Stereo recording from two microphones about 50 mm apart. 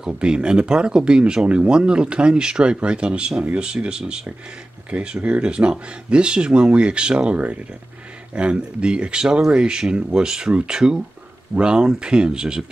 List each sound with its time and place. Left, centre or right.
0.1 s speech: centre
5.0 s speech: centre